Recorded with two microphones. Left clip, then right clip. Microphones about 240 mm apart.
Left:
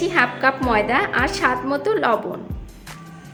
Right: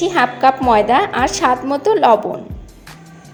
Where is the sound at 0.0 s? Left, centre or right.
Centre.